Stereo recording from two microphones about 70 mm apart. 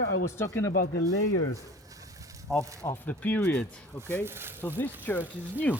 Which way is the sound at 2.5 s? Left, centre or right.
Left.